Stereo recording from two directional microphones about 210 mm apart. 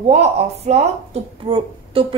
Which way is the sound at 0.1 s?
30° right (ahead or behind).